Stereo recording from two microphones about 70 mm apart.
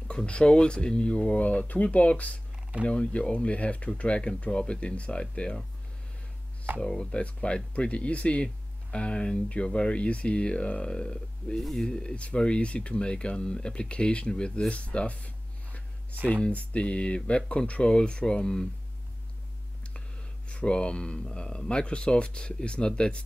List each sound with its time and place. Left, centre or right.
0.1 s speech: centre
6.8 s speech: centre
14.7 s a sound: centre
16.4 s speech: centre
20.4 s speech: centre